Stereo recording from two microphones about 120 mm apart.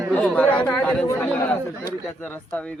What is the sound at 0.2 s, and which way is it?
Speech, 10° left (ahead or behind).